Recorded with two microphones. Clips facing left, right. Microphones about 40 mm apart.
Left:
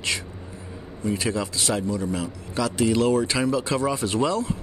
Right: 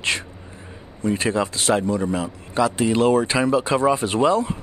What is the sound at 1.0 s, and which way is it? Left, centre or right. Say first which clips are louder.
A man's voice: right 4 dB; right.